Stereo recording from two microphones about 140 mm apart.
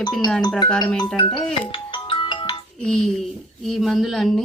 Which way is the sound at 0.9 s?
35° left (ahead or behind).